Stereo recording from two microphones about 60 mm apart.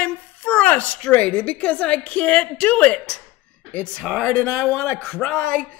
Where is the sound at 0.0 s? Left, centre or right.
Left.